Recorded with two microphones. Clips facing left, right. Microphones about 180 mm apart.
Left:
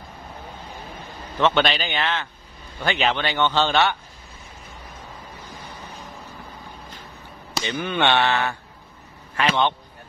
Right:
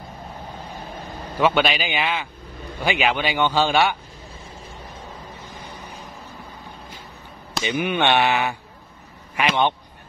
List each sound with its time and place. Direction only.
1.4 s a man's voice: 10° right (ahead or behind)
7.6 s a man's voice: 15° right (ahead or behind)